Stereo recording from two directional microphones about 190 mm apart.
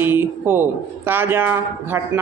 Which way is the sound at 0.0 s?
10° right (ahead or behind).